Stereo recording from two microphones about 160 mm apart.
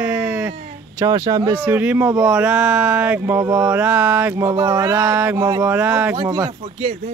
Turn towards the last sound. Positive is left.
turn(degrees=-45)  # may be behind; listen again after turning